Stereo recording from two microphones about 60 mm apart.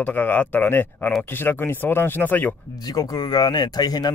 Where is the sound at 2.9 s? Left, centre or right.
Left.